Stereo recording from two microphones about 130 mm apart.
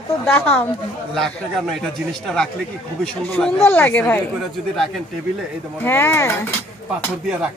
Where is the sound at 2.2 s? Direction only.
5° left (ahead or behind).